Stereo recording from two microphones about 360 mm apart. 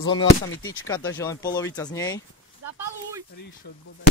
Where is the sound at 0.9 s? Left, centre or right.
Centre.